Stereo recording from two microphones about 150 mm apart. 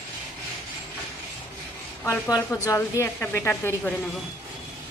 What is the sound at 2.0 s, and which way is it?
A woman's voice, 15° left (ahead or behind).